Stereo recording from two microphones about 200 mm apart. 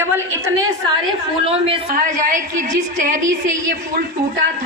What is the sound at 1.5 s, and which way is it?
Speech, 30° right (ahead or behind).